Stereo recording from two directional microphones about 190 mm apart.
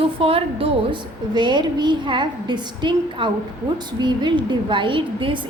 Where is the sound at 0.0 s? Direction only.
30° right (ahead or behind).